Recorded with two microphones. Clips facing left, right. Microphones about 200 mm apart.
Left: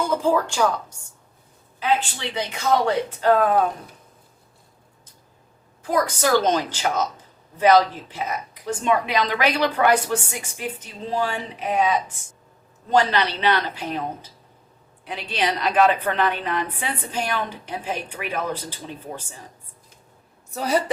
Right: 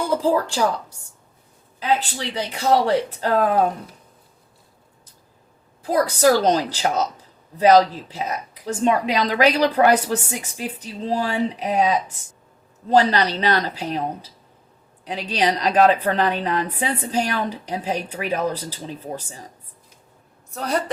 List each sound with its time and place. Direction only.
0.1 s a woman's voice: 35° right (ahead or behind)
5.8 s a woman's voice: 35° right (ahead or behind)
20.5 s a woman's voice: 5° left (ahead or behind)